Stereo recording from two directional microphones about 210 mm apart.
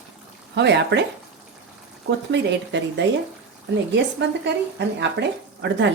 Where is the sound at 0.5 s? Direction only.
55° right (ahead or behind).